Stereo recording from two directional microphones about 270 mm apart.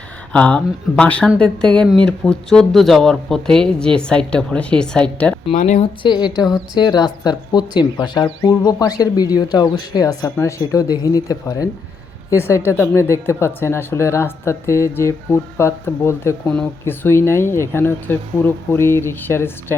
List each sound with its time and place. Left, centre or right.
0.3 s speech: centre
5.5 s speech: left; by 19.7 s centre